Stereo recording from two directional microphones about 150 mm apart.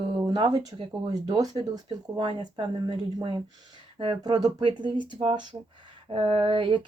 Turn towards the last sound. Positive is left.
turn(degrees=-35)  # may be behind; listen again after turning